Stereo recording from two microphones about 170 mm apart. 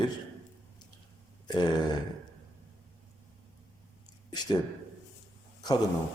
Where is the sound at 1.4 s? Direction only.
25° left (ahead or behind).